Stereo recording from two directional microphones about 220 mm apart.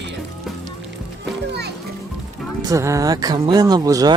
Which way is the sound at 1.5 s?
50° right (ahead or behind).